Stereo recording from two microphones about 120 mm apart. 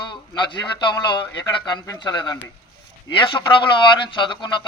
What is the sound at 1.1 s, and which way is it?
A man's voice, 35° left (ahead or behind).